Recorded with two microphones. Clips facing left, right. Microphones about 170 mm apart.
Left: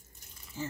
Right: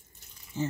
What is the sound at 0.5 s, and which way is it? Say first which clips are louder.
Speech: right 6 dB; 20° right (ahead or behind).